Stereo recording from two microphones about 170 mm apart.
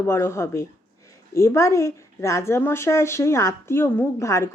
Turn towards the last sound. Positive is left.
turn(degrees=15)  # may be behind; listen again after turning